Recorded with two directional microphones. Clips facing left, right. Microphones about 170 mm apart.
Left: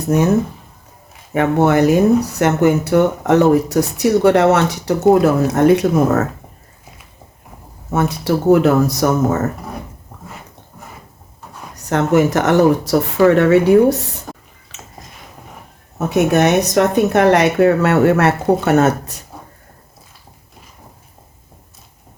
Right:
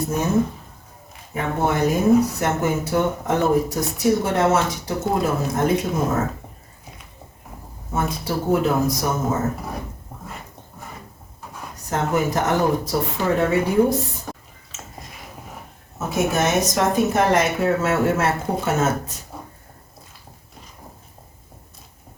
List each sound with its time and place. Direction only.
1.3 s speech: 75° left (ahead or behind)
7.9 s speech: 75° left (ahead or behind)
11.9 s speech: 75° left (ahead or behind)
14.3 s a sound: centre (ahead or behind)
14.7 s a sound: 70° left (ahead or behind)
16.0 s speech: 65° left (ahead or behind)